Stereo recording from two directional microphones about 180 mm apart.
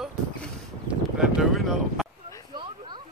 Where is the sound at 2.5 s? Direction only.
25° right (ahead or behind).